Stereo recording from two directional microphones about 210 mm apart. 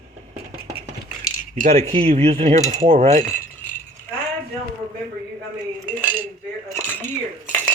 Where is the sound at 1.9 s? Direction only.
30° right (ahead or behind).